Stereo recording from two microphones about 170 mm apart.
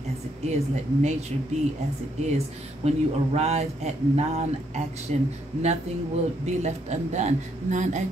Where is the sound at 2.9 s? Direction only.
40° right (ahead or behind).